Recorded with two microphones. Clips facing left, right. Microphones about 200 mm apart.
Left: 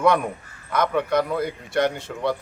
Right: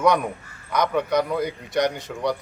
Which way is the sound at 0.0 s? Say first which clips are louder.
Even; 5° left (ahead or behind).